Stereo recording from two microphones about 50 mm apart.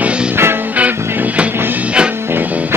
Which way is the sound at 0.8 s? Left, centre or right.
Right.